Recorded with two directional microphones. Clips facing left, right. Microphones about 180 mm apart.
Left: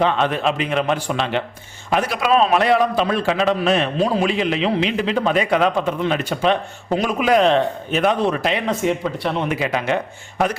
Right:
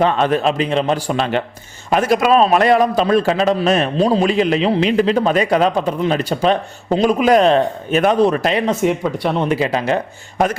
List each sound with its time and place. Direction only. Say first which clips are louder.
0.0 s a man's voice: right 3 dB; 40° right (ahead or behind)
7.2 s a man's voice: right 1 dB; 40° right (ahead or behind)